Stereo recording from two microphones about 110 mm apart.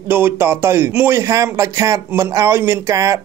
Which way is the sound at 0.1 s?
20° right (ahead or behind).